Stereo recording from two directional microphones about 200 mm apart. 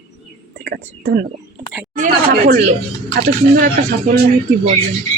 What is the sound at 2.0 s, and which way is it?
A woman's voice, 40° right (ahead or behind).